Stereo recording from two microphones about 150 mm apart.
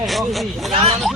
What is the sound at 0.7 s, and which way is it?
Speech, 40° right (ahead or behind).